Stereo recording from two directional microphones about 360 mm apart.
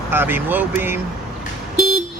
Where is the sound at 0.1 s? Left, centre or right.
Centre.